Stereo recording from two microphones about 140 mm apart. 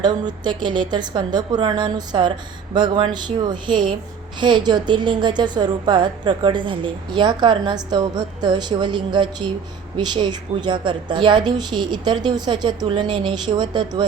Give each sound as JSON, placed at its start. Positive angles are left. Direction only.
{"t": 0.0, "sound": "a woman's voice", "side_deg": -30}